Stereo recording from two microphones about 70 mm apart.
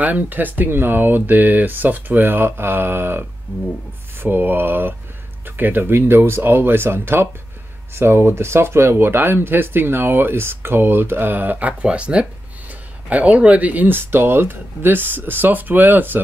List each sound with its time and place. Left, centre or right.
0.0 s speech: right